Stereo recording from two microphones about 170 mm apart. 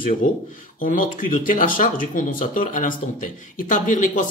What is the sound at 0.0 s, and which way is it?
Speech, 50° left (ahead or behind).